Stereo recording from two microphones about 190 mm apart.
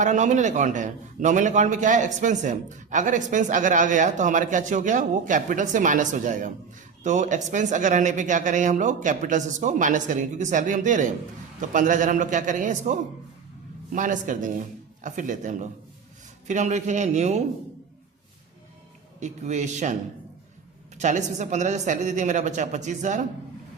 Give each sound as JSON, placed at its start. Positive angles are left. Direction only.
{"t": 0.0, "sound": "a man's voice", "side_deg": -40}
{"t": 19.2, "sound": "a man's voice", "side_deg": -40}
{"t": 21.0, "sound": "a man's voice", "side_deg": -40}